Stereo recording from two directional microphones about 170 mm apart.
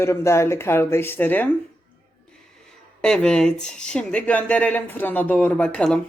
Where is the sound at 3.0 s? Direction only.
5° left (ahead or behind).